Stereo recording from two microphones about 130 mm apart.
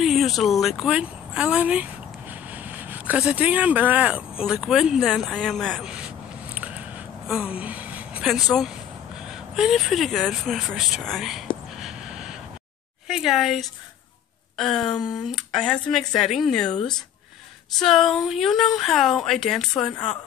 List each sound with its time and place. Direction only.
0.0 s speech: centre (ahead or behind)
5.9 s a sound: 10° right (ahead or behind)
9.3 s speech: 5° right (ahead or behind)
11.8 s a sound: 5° right (ahead or behind)
13.1 s speech: centre (ahead or behind)
15.0 s speech: 35° left (ahead or behind)
15.3 s speech: 5° left (ahead or behind)